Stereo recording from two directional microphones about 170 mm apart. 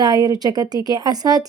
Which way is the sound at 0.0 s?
25° right (ahead or behind).